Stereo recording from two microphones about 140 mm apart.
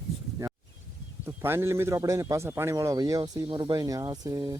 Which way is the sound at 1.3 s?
15° right (ahead or behind).